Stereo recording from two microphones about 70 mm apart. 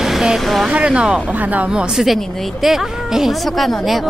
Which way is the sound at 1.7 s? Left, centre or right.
Centre.